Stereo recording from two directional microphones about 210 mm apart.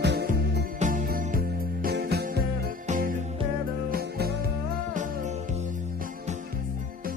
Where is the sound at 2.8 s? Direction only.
35° right (ahead or behind).